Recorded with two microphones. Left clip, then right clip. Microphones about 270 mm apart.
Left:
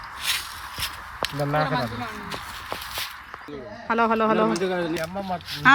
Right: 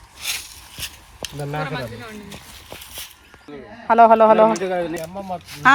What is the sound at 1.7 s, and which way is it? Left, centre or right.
Speech, left.